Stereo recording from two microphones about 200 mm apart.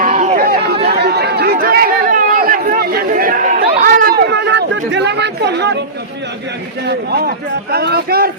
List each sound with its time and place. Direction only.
0.0 s chatter: 40° right (ahead or behind)
4.2 s chatter: 55° right (ahead or behind)
6.8 s a man's voice: 55° right (ahead or behind)